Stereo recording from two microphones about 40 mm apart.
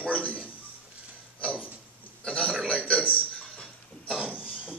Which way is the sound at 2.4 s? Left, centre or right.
Right.